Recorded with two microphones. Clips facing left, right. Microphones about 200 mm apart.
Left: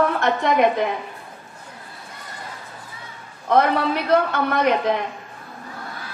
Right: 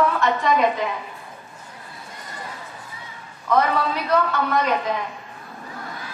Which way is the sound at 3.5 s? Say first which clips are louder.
Left 2 dB; 60° left (ahead or behind).